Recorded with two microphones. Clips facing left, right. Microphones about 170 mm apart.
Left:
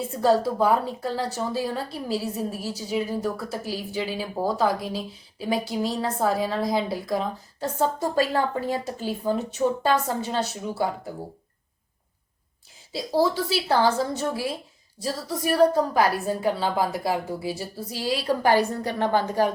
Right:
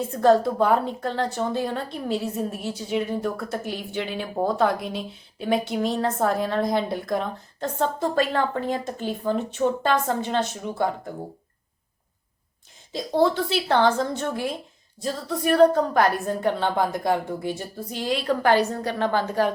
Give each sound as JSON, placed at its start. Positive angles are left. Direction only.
{"t": 0.1, "sound": "a woman's voice", "side_deg": 5}
{"t": 12.9, "sound": "a woman's voice", "side_deg": 5}